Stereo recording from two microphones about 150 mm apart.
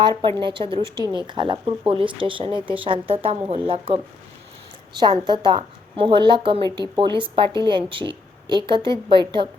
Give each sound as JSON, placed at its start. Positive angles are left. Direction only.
{"t": 0.0, "sound": "speech", "side_deg": -30}
{"t": 5.2, "sound": "speech", "side_deg": -30}